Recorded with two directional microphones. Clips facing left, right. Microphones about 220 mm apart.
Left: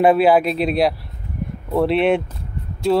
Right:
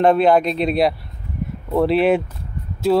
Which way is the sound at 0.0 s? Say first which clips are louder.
Left 1 dB; 5° left (ahead or behind).